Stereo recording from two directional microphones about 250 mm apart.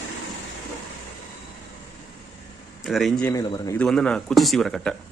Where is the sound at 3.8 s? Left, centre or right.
Centre.